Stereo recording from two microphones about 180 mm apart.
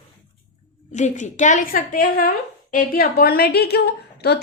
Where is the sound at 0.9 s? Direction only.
40° left (ahead or behind).